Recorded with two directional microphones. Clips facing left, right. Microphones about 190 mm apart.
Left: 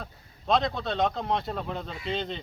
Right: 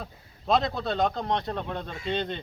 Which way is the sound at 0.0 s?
Centre (ahead or behind).